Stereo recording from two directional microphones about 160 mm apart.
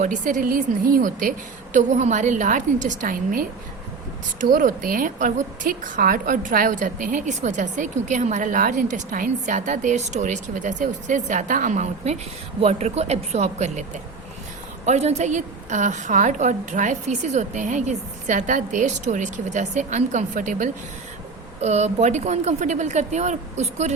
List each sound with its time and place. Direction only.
0.0 s a woman's voice: 50° right (ahead or behind)